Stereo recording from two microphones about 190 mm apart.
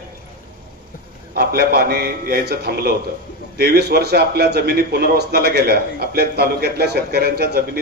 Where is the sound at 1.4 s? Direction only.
55° right (ahead or behind).